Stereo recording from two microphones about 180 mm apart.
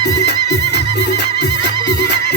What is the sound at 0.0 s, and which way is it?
Music, 70° left (ahead or behind).